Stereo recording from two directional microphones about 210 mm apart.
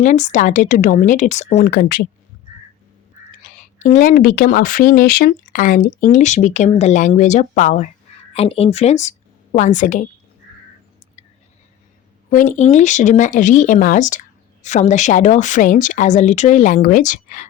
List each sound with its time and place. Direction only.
0.0 s speech: 35° left (ahead or behind)
1.6 s speech: 45° left (ahead or behind)
3.8 s a woman's voice: 35° left (ahead or behind)
12.3 s speech: 40° left (ahead or behind)